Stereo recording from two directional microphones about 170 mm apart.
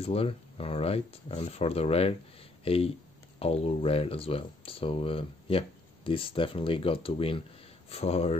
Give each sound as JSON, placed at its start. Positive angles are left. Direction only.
{"t": 0.0, "sound": "speech", "side_deg": 35}